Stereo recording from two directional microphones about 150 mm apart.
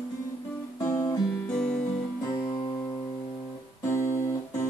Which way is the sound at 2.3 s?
20° left (ahead or behind).